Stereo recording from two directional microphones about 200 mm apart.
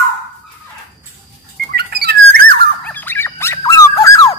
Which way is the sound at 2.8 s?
10° left (ahead or behind).